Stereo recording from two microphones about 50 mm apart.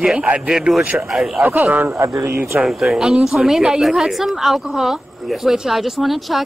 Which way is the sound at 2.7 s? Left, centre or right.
Centre.